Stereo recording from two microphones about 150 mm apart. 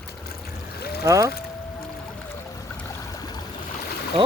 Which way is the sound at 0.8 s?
90° left.